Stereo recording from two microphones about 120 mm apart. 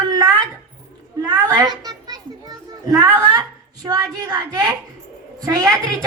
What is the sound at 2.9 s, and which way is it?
A woman's voice, 35° right (ahead or behind).